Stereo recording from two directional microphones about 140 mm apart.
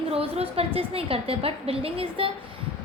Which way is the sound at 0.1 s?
45° right (ahead or behind).